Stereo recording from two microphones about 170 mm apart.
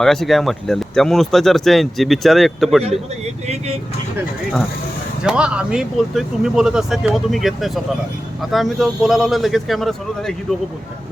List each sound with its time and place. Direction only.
0.0 s speech: centre (ahead or behind)
3.4 s vehicle: 40° right (ahead or behind)
5.2 s speech: 5° right (ahead or behind)